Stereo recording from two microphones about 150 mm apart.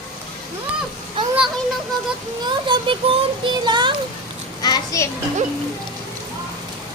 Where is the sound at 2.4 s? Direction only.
30° right (ahead or behind).